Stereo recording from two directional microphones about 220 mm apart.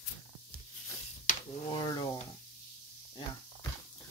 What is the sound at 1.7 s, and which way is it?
Speech, 20° left (ahead or behind).